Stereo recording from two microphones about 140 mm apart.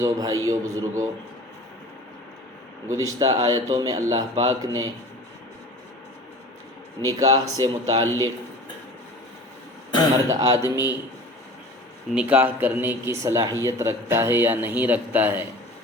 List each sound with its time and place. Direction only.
0.0 s speech: 25° right (ahead or behind)
2.8 s speech: 25° right (ahead or behind)
7.0 s speech: 25° right (ahead or behind)
10.2 s speech: 20° right (ahead or behind)
12.1 s a man's voice: 10° right (ahead or behind)